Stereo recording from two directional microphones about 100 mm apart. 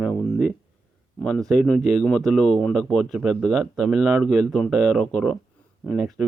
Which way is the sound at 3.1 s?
5° right (ahead or behind).